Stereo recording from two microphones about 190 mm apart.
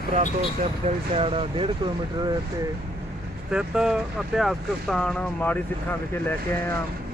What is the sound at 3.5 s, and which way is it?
Speech, 5° right (ahead or behind).